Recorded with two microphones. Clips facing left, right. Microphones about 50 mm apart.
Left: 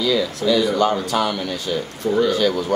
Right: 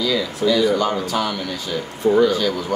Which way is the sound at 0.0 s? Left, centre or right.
Centre.